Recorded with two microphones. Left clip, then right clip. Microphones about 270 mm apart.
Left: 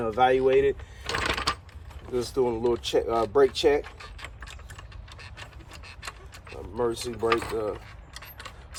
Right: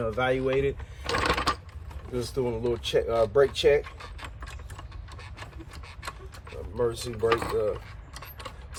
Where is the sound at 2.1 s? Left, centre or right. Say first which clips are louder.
Left 4 dB; centre.